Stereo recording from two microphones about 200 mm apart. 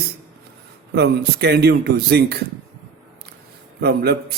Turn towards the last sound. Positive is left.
turn(degrees=-50)  # may be behind; listen again after turning